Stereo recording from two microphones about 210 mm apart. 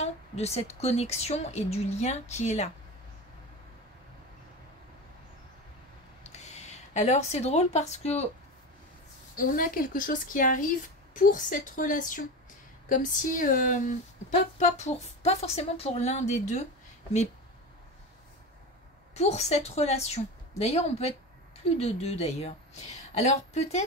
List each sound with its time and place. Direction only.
0.0 s a woman's voice: 30° left (ahead or behind)
6.3 s speech: 30° left (ahead or behind)
9.4 s a woman's voice: 40° left (ahead or behind)
19.1 s a woman's voice: 30° left (ahead or behind)